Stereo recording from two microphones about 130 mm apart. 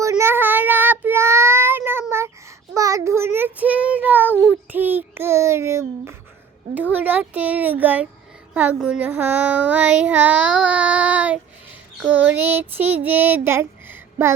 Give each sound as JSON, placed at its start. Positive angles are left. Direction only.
{"t": 0.0, "sound": "child singing", "side_deg": -20}
{"t": 6.9, "sound": "a sound", "side_deg": -15}
{"t": 8.5, "sound": "child singing", "side_deg": -10}